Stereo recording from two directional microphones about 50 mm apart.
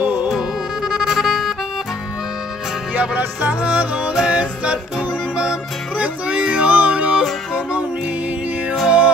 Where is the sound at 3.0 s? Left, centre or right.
Right.